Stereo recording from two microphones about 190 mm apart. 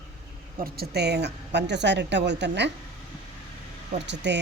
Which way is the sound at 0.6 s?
50° right (ahead or behind).